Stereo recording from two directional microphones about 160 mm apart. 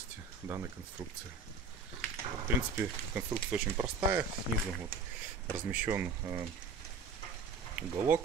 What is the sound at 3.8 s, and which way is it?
Speech, 15° right (ahead or behind).